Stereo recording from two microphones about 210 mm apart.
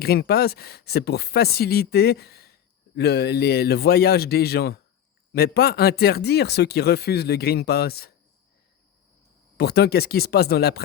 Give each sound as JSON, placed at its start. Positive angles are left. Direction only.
{"t": 0.0, "sound": "speech", "side_deg": 50}
{"t": 9.6, "sound": "speech", "side_deg": 50}